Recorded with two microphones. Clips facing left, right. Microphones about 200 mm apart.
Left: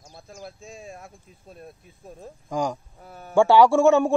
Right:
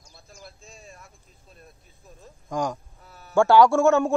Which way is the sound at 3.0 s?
50° left (ahead or behind).